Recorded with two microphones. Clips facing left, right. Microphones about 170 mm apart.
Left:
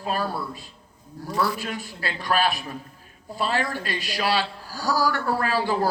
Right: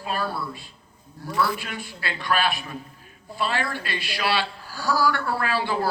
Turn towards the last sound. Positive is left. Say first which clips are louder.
# left 2 dB
turn(degrees=40)  # may be behind; listen again after turning